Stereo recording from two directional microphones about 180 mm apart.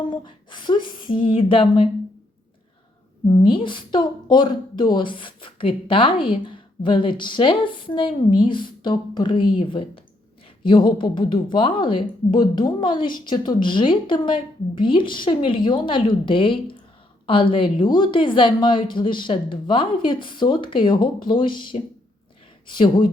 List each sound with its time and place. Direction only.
0.0 s a sound: 25° left (ahead or behind)
1.3 s speech: 30° left (ahead or behind)
3.5 s speech: 25° left (ahead or behind)